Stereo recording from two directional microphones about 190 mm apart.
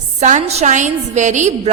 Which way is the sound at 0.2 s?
40° right (ahead or behind).